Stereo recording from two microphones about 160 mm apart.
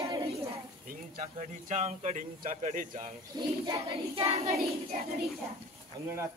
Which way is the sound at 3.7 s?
30° right (ahead or behind).